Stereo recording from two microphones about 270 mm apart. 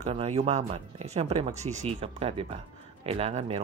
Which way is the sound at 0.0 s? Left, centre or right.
Right.